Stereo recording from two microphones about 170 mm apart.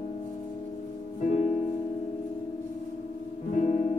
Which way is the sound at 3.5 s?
40° left (ahead or behind).